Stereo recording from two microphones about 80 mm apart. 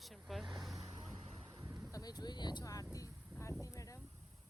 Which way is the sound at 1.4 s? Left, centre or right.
Right.